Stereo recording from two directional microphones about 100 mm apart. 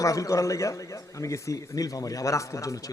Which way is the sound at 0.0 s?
35° left (ahead or behind).